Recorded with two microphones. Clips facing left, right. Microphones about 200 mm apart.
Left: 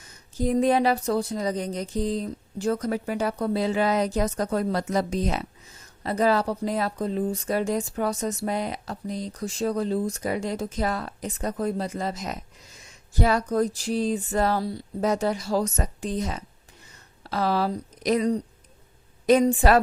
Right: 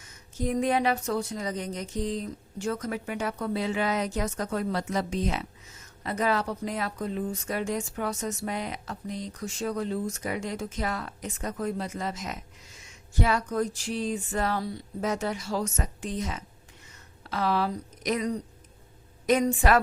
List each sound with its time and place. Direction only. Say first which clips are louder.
0.3 s a woman's voice: left 5 dB; 35° left (ahead or behind)